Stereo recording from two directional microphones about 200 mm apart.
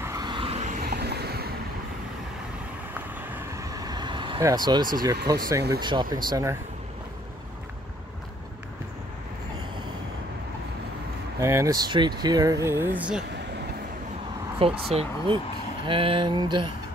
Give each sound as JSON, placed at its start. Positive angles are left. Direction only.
{"t": 0.0, "sound": "vehicle", "side_deg": -20}
{"t": 0.8, "sound": "vehicle", "side_deg": -55}
{"t": 3.2, "sound": "vehicle", "side_deg": -10}
{"t": 5.2, "sound": "speech", "side_deg": -20}
{"t": 11.3, "sound": "speech", "side_deg": -15}
{"t": 14.6, "sound": "speech", "side_deg": -30}